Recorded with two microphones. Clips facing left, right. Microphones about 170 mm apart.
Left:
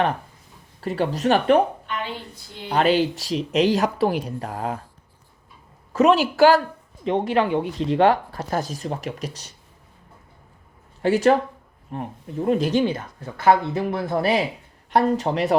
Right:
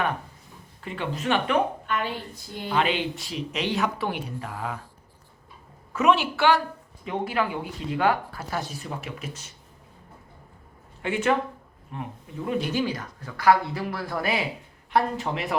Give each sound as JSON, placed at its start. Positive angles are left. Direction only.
{"t": 0.8, "sound": "speech", "side_deg": 40}
{"t": 2.6, "sound": "speech", "side_deg": 40}
{"t": 5.9, "sound": "speech", "side_deg": 35}
{"t": 7.0, "sound": "speech", "side_deg": 25}
{"t": 11.0, "sound": "speech", "side_deg": 35}
{"t": 12.7, "sound": "speech", "side_deg": 25}